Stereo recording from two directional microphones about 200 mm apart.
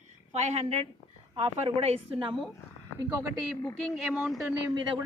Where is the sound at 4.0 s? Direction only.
5° right (ahead or behind).